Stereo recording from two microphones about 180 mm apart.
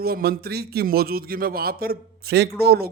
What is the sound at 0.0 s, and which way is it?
A man's voice, 55° right (ahead or behind).